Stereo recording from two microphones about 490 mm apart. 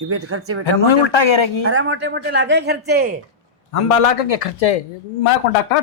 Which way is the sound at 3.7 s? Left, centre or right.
Left.